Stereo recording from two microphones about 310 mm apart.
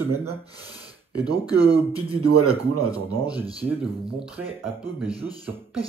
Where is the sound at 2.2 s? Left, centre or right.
Right.